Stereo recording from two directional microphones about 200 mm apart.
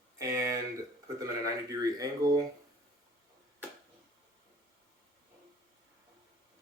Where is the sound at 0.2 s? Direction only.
15° right (ahead or behind).